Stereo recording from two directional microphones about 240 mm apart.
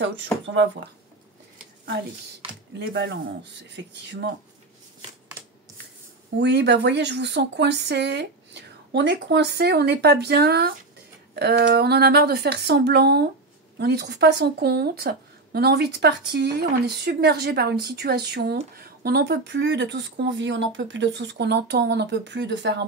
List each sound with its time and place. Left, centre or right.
0.0 s speech: right
2.8 s speech: right
6.4 s speech: right